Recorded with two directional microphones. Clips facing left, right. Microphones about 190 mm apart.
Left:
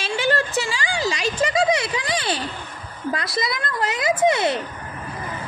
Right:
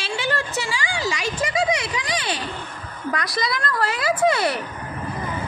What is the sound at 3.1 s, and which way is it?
A woman's voice, 25° left (ahead or behind).